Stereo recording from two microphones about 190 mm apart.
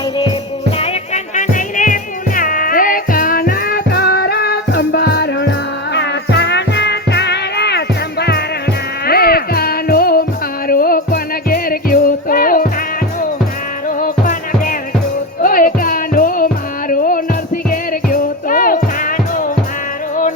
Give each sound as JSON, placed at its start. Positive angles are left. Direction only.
{"t": 0.8, "sound": "music", "side_deg": 40}
{"t": 14.0, "sound": "music", "side_deg": 45}